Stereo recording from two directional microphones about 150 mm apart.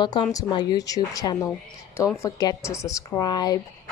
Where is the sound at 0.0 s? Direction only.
25° left (ahead or behind).